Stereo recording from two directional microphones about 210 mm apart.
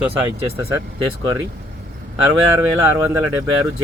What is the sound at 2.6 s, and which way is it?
Speech, 10° right (ahead or behind).